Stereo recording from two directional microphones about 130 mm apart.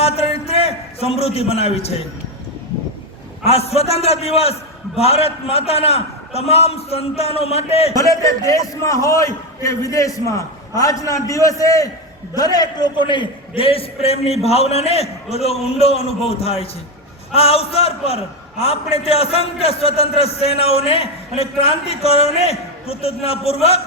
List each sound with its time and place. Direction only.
0.0 s a sound: 50° left (ahead or behind)
3.4 s a man's voice: 50° left (ahead or behind)
7.9 s a man's voice: 25° left (ahead or behind); by 23.8 s 50° left (ahead or behind)